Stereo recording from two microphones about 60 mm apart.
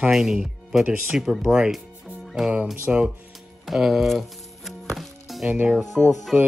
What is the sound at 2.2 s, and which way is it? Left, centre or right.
Music, centre.